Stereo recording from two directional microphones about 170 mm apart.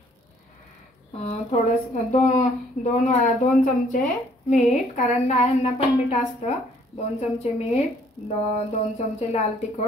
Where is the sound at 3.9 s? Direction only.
50° left (ahead or behind).